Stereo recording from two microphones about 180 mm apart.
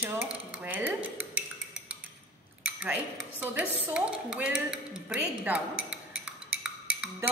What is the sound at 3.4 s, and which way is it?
A woman's voice, 10° right (ahead or behind).